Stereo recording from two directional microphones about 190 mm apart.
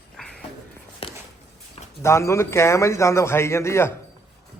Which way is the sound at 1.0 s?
30° left (ahead or behind).